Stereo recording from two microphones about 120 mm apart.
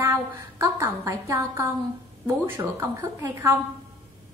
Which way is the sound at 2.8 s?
20° right (ahead or behind).